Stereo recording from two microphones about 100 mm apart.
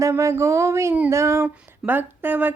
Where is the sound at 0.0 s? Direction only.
30° right (ahead or behind).